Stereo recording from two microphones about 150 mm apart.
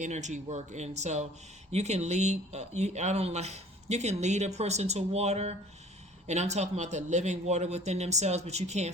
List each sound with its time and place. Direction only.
0.0 s speech: 50° right (ahead or behind)